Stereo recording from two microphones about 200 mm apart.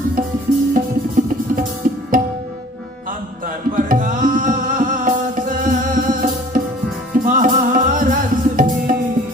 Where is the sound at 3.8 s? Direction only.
40° right (ahead or behind).